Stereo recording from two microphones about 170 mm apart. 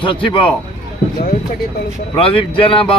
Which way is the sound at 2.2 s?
30° left (ahead or behind).